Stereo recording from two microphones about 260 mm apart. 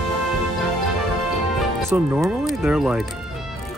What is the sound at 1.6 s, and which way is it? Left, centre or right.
Speech, centre.